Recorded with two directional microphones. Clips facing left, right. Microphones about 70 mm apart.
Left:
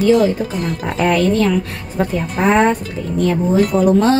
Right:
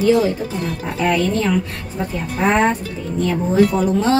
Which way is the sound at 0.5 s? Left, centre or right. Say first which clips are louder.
Left 3 dB; left.